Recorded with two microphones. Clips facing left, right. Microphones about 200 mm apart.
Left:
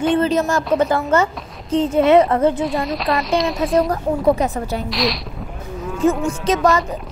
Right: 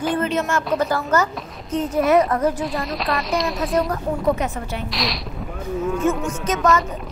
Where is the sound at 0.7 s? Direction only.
25° left (ahead or behind).